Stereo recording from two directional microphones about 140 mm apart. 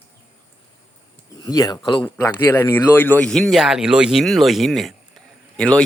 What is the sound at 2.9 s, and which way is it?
Speech, 15° left (ahead or behind).